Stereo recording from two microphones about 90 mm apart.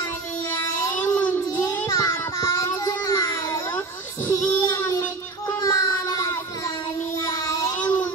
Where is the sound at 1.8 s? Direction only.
45° left (ahead or behind).